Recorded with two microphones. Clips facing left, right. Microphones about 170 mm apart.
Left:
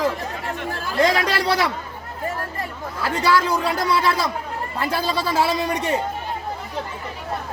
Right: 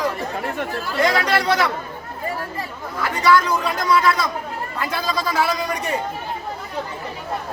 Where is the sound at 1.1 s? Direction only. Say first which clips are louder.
Right 4 dB; 30° left (ahead or behind).